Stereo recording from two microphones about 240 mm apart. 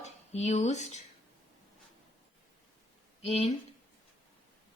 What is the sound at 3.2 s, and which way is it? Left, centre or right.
Speech, left.